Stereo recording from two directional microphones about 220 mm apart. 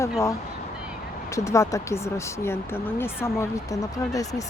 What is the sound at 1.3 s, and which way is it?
Speech, 15° left (ahead or behind).